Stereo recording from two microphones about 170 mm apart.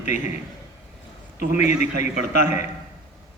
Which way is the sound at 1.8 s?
45° left (ahead or behind).